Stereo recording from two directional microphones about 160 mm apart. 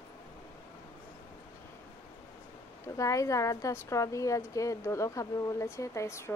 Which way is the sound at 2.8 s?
20° left (ahead or behind).